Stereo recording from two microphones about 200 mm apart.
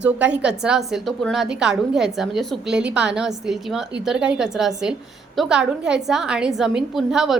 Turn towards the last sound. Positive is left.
turn(degrees=0)  # may be behind; listen again after turning